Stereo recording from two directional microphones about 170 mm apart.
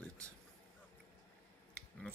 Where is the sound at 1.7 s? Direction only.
5° left (ahead or behind).